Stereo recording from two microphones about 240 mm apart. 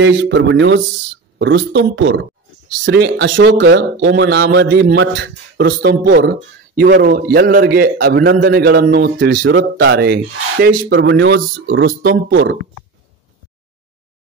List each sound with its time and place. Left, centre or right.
0.0 s a man's voice: right